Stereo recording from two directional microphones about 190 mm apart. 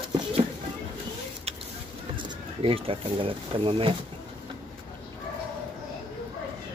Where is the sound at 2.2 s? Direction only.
30° right (ahead or behind).